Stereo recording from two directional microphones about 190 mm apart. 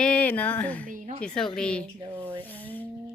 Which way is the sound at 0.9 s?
45° right (ahead or behind).